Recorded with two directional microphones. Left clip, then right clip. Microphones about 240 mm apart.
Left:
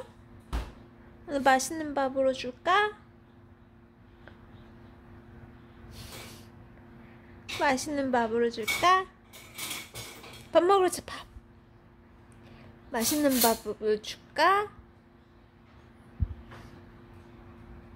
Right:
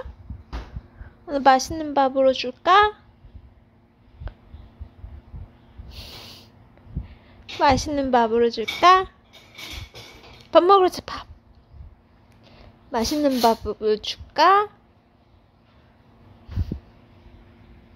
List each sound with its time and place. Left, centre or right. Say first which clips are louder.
1.2 s a woman's voice: right 7 dB; centre
5.9 s snort: right 6 dB; centre
7.5 s a woman's voice: right 8 dB; right
10.5 s speech: right 8 dB; centre
12.9 s a woman's voice: right 5 dB; centre